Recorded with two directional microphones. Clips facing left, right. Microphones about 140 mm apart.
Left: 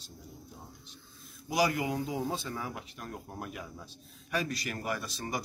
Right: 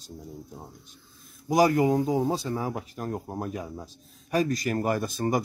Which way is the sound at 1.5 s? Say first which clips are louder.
Right 9 dB; 45° right (ahead or behind).